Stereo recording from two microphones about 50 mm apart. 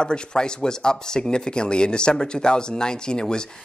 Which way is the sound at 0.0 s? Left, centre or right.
Centre.